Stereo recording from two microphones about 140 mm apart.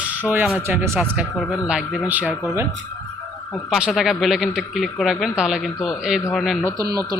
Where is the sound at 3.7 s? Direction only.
5° right (ahead or behind).